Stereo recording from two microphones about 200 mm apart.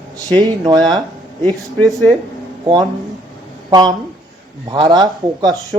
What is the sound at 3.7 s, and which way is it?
Speech, 20° right (ahead or behind).